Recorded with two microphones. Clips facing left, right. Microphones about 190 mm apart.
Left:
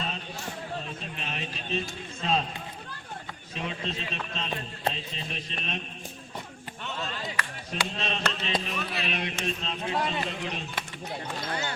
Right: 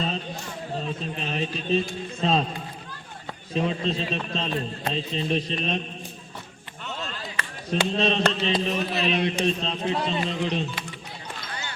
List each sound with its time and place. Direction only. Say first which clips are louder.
1.1 s a man's voice: right 8 dB; 35° right (ahead or behind)
3.5 s a man's voice: right 9 dB; 35° right (ahead or behind)
7.3 s a man's voice: right 6 dB; 30° right (ahead or behind)